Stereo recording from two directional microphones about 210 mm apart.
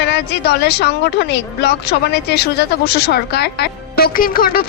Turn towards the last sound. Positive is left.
turn(degrees=45)  # may be behind; listen again after turning